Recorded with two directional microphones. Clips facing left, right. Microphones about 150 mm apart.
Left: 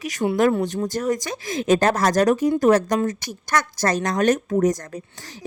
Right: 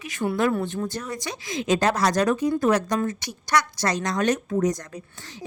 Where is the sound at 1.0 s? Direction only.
40° left (ahead or behind).